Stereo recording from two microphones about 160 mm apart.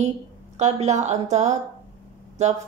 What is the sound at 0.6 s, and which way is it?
Speech, 45° right (ahead or behind).